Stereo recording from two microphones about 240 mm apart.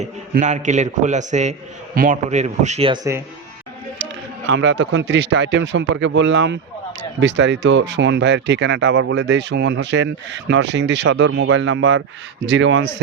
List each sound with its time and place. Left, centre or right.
0.0 s a man's voice: right; by 3.2 s centre
4.4 s speech: right